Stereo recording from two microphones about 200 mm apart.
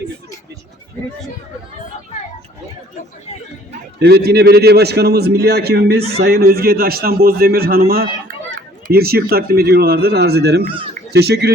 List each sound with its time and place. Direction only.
4.0 s a man's voice: 55° right (ahead or behind)